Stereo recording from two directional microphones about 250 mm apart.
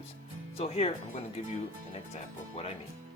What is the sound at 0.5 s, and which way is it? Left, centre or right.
Speech, left.